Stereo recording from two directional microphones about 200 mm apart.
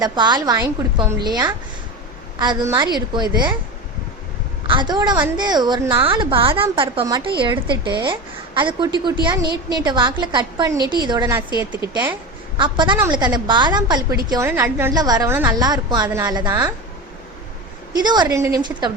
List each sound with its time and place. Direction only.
0.0 s a woman's voice: 20° right (ahead or behind)
4.6 s a woman's voice: 25° right (ahead or behind)
12.5 s a woman's voice: 25° right (ahead or behind)
18.0 s a woman's voice: 20° right (ahead or behind)